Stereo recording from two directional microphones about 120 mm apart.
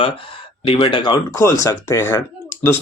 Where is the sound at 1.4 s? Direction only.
25° left (ahead or behind).